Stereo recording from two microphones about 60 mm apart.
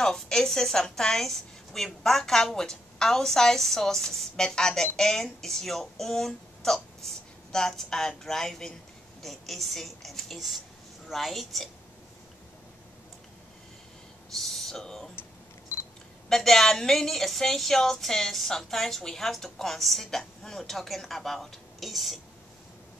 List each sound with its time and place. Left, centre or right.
0.0 s a woman's voice: centre
14.3 s speech: centre
16.3 s a woman's voice: centre